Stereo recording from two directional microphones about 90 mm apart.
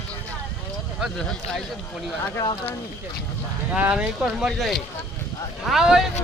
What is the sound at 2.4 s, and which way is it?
Speech, 80° left.